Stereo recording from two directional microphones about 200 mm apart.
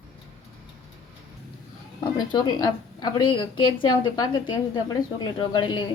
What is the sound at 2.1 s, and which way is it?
Speech, 20° left (ahead or behind).